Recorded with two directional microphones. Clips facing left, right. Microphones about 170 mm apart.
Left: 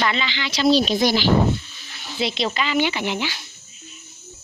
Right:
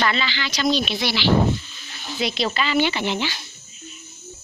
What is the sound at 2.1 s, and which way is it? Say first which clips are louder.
A woman's voice: even; 25° left (ahead or behind).